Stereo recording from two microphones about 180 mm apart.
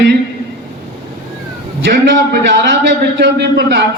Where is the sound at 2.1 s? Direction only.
70° right (ahead or behind).